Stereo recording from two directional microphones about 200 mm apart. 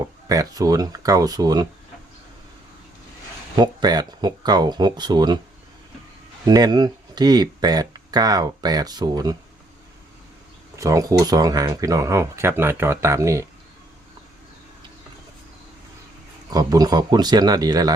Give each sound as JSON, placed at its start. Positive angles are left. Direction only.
{"t": 0.3, "sound": "speech", "side_deg": -15}
{"t": 3.5, "sound": "speech", "side_deg": -20}
{"t": 6.5, "sound": "speech", "side_deg": -20}
{"t": 10.8, "sound": "speech", "side_deg": -15}
{"t": 16.5, "sound": "speech", "side_deg": -20}